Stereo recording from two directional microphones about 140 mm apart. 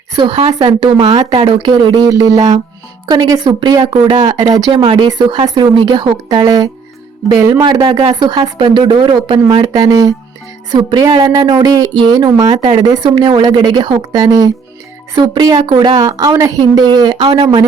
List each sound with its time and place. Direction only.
0.2 s a woman's voice: 35° right (ahead or behind)
7.6 s a woman's voice: 35° right (ahead or behind)